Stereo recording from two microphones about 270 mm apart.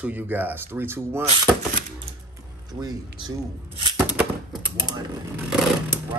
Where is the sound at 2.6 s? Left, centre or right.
Centre.